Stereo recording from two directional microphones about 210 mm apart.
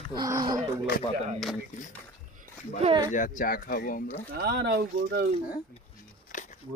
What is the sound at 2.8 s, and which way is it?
Speech, 25° right (ahead or behind).